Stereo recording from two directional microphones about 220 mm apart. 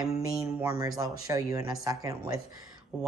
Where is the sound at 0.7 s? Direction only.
15° right (ahead or behind).